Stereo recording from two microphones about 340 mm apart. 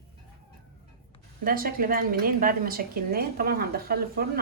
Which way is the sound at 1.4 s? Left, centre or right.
Right.